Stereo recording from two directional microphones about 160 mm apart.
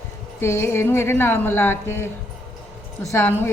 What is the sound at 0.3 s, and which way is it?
A woman's voice, 15° left (ahead or behind).